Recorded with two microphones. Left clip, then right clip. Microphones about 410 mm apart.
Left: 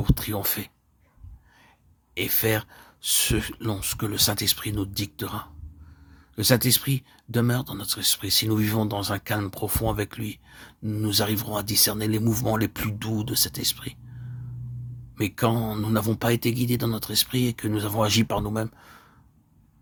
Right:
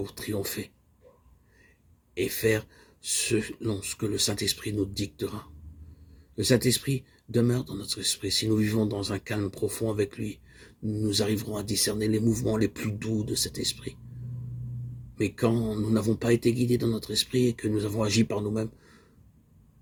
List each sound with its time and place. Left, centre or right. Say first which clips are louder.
0.0 s speech: left 3 dB; left
2.1 s speech: even; left
15.1 s speech: left 2 dB; left